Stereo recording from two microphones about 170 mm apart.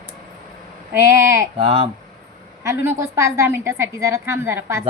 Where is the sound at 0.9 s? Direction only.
15° right (ahead or behind).